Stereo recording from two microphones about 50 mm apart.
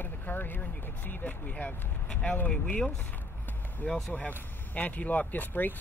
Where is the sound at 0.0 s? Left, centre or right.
Left.